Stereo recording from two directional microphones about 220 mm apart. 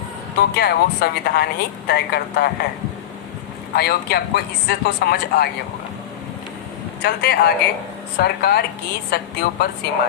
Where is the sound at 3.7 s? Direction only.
45° left (ahead or behind).